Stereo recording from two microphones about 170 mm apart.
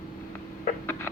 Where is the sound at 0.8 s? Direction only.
15° left (ahead or behind).